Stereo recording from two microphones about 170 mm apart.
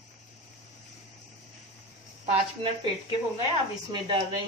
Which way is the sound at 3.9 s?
25° right (ahead or behind).